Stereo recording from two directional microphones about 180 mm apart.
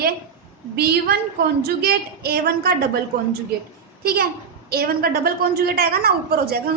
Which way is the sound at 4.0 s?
60° right (ahead or behind).